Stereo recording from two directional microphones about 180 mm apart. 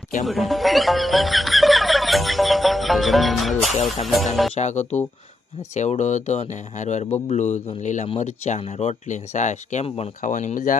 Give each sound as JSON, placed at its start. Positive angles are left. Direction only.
{"t": 0.3, "sound": "speech", "side_deg": 0}
{"t": 4.5, "sound": "speech", "side_deg": 40}